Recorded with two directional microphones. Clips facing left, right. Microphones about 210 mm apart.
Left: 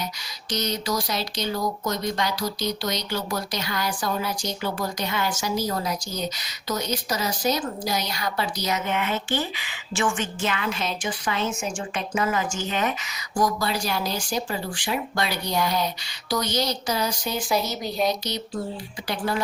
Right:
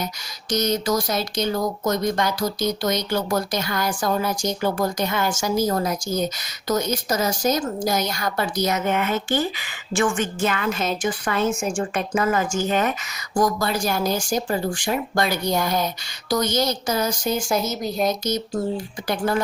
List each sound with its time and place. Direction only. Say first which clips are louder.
0.5 s speech: right 5 dB; 45° right (ahead or behind)
17.4 s speech: right 2 dB; centre (ahead or behind)
18.3 s speech: right 6 dB; 45° right (ahead or behind)